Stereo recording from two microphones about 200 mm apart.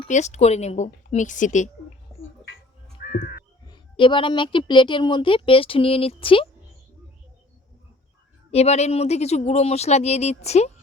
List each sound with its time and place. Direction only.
0.1 s speech: 35° left (ahead or behind)
2.1 s a sound: centre (ahead or behind)
3.1 s crow: 45° left (ahead or behind)
3.7 s a woman's voice: 25° left (ahead or behind)
8.4 s speech: 30° left (ahead or behind)